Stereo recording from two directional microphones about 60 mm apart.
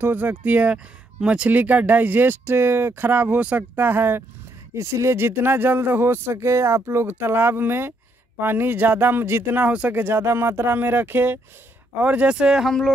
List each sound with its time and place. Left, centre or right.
0.0 s speech: right
4.7 s speech: right
5.1 s speech: right
6.3 s speech: right
9.7 s speech: centre
9.9 s speech: right
12.0 s speech: right
12.6 s speech: centre